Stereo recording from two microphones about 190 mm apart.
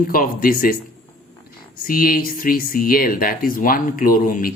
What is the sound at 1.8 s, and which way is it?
Speech, 50° left (ahead or behind).